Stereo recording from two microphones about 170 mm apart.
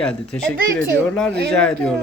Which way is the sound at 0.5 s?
60° right (ahead or behind).